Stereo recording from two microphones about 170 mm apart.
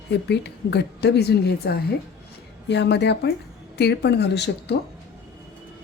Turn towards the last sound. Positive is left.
turn(degrees=85)